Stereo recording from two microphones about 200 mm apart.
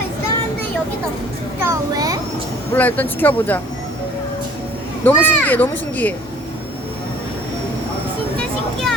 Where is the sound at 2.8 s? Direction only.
10° left (ahead or behind).